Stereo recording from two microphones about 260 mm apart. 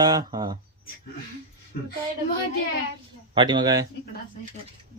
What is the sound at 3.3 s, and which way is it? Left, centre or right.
Speech, centre.